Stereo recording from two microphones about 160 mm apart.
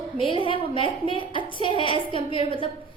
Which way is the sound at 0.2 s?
30° left (ahead or behind).